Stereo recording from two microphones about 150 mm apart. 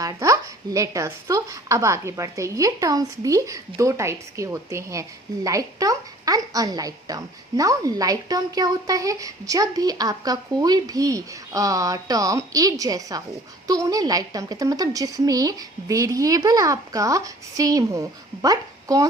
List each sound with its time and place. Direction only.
0.0 s a woman's voice: 20° right (ahead or behind)